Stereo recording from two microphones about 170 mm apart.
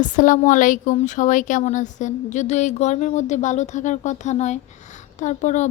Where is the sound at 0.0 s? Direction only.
50° left (ahead or behind).